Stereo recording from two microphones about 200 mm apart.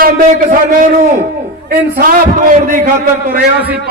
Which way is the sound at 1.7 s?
50° right (ahead or behind).